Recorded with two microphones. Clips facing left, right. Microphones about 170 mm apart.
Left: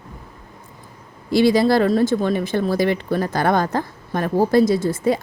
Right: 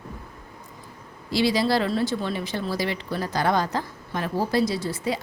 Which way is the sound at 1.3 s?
50° left (ahead or behind).